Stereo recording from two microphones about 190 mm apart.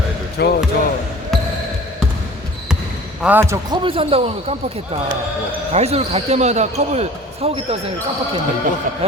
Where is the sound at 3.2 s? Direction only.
10° right (ahead or behind); by 7.8 s 30° right (ahead or behind).